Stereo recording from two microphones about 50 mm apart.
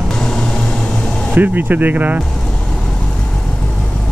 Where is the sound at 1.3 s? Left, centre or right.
Right.